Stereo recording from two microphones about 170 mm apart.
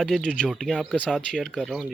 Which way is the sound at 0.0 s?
Centre (ahead or behind).